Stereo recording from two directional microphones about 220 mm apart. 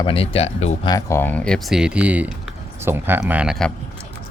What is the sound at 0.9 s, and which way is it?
Speech, 10° left (ahead or behind).